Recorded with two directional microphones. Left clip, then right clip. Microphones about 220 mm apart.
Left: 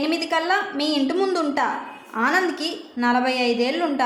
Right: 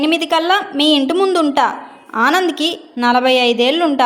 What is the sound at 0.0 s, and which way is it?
A woman's voice, 35° right (ahead or behind).